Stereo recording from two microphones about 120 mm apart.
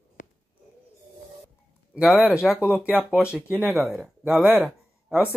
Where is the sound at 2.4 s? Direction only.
Centre (ahead or behind).